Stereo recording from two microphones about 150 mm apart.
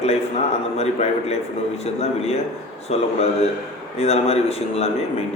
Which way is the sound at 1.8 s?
45° left (ahead or behind).